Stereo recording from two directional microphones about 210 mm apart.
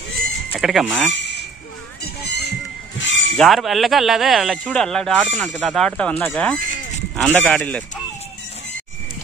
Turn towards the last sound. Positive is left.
turn(degrees=5)  # may be behind; listen again after turning